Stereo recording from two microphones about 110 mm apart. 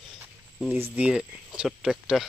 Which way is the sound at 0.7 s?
20° right (ahead or behind).